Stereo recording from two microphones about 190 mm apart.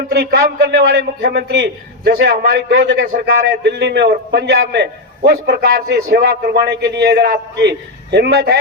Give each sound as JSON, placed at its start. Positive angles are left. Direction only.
{"t": 0.1, "sound": "a man's voice", "side_deg": -60}